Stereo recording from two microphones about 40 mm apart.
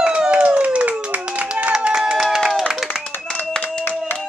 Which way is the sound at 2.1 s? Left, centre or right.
Centre.